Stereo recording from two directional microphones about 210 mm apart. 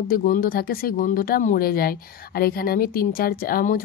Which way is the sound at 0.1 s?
40° left (ahead or behind).